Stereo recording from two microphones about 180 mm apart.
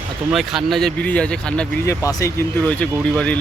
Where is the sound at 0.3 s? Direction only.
Centre (ahead or behind).